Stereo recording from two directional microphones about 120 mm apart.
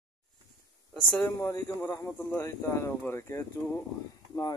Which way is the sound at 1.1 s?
20° left (ahead or behind).